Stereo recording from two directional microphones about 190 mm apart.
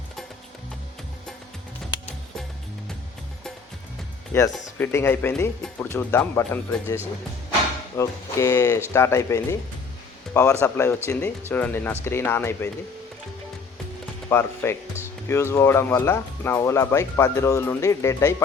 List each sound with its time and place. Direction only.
4.3 s speech: 15° left (ahead or behind)
7.9 s speech: 15° left (ahead or behind)
14.3 s mechanisms: 10° left (ahead or behind)
15.3 s speech: 15° left (ahead or behind)